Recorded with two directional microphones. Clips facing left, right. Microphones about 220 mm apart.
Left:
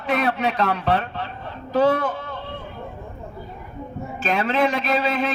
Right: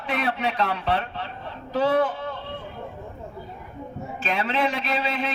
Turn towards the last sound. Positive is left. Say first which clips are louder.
# left 5 dB
turn(degrees=45)  # may be behind; listen again after turning